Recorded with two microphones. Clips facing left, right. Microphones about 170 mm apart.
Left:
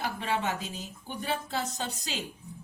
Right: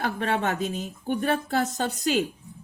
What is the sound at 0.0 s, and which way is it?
Speech, 55° right (ahead or behind).